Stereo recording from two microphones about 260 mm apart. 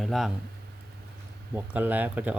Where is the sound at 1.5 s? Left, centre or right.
Centre.